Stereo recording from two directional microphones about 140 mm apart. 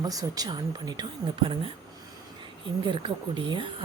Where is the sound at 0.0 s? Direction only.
25° right (ahead or behind).